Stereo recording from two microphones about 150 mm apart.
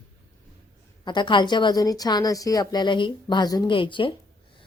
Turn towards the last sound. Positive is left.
turn(degrees=35)  # may be behind; listen again after turning